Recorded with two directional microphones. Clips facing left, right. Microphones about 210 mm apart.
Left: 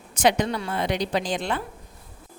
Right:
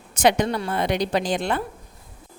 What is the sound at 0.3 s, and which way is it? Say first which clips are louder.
A woman's voice: right 2 dB; 55° right (ahead or behind).